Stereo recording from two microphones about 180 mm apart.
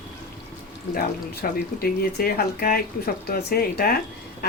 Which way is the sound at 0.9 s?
55° left (ahead or behind).